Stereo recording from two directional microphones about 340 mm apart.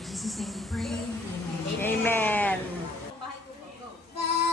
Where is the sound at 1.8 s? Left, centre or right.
Centre.